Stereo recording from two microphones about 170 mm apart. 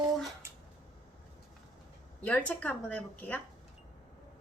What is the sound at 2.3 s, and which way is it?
A woman's voice, 10° left (ahead or behind).